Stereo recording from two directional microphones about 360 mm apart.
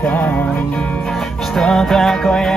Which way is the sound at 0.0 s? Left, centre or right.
Centre.